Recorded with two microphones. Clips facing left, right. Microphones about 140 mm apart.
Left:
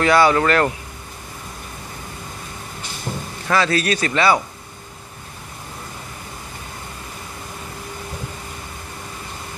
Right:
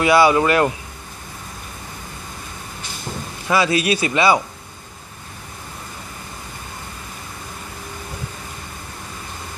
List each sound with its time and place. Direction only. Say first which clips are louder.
0.0 s speech: right 1 dB; 10° right (ahead or behind)
3.4 s speech: right 1 dB; 10° right (ahead or behind)